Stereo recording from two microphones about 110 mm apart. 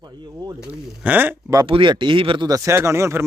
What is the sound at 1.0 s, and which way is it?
Speech, 15° right (ahead or behind).